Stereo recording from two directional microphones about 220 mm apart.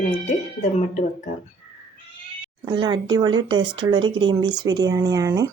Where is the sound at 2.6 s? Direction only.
20° right (ahead or behind).